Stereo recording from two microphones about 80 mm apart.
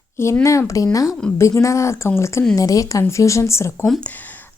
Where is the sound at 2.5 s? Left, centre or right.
Left.